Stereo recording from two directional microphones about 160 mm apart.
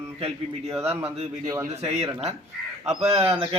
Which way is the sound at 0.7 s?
40° right (ahead or behind).